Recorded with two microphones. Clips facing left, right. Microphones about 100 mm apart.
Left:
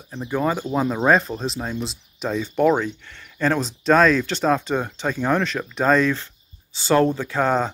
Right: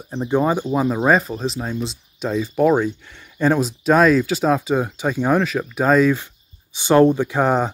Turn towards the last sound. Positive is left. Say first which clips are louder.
# right 3 dB
turn(degrees=-15)  # may be behind; listen again after turning